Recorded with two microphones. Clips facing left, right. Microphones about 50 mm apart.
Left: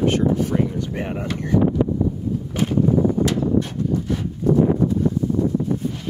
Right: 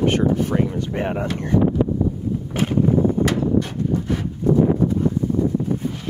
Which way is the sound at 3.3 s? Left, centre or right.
Right.